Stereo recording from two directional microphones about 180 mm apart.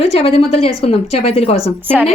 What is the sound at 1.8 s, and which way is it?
Speech, 10° right (ahead or behind).